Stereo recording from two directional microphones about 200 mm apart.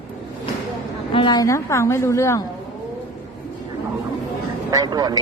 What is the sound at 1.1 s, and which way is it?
A woman's voice, 20° left (ahead or behind).